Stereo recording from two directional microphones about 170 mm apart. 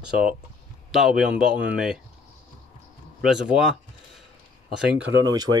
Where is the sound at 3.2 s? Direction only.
5° right (ahead or behind).